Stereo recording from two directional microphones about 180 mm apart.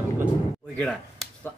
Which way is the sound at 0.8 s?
Centre (ahead or behind).